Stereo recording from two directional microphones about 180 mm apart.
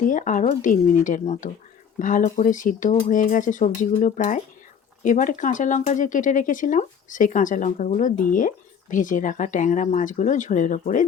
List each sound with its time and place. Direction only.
0.0 s speech: 45° left (ahead or behind)